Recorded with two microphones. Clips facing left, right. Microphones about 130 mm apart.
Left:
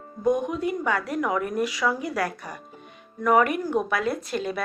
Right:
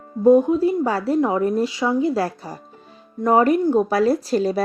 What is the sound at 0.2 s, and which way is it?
A woman's voice, 30° right (ahead or behind).